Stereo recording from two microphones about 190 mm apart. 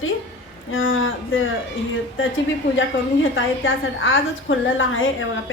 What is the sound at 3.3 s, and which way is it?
A woman's voice, 90° left.